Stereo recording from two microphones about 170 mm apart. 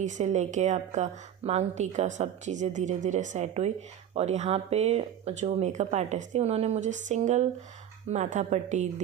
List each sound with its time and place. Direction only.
0.0 s a woman's voice: 45° right (ahead or behind)